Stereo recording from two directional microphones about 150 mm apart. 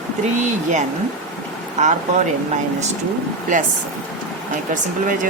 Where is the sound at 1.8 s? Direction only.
55° right (ahead or behind).